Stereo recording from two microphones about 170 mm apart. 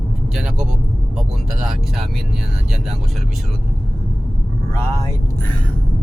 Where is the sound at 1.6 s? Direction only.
5° right (ahead or behind).